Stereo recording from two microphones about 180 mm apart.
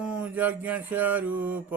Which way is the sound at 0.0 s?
5° right (ahead or behind).